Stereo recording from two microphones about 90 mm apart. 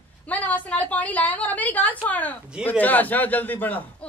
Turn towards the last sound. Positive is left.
turn(degrees=20)  # may be behind; listen again after turning